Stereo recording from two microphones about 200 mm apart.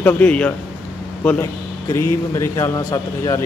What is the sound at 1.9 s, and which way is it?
Speech, 15° left (ahead or behind).